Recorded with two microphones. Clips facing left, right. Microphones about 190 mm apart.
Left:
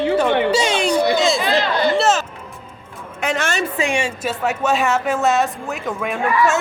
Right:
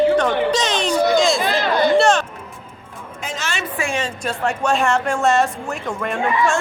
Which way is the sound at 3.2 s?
65° left (ahead or behind).